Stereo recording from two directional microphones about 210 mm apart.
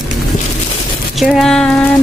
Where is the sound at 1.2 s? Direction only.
Centre (ahead or behind).